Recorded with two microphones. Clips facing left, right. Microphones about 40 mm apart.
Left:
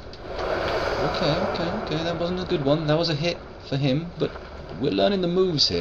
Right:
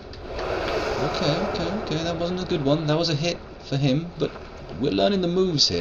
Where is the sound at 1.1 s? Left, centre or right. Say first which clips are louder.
Left 1 dB; centre.